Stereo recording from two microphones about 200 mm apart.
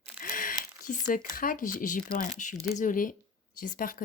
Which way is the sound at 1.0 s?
45° left (ahead or behind).